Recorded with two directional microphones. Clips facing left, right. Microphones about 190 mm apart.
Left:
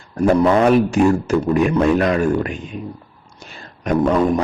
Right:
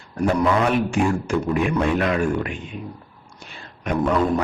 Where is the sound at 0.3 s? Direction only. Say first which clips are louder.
Left 6 dB; 40° left (ahead or behind).